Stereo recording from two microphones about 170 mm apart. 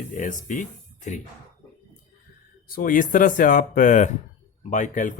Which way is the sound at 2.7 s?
55° left (ahead or behind).